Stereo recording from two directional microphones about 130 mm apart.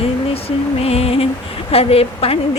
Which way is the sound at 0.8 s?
50° left (ahead or behind).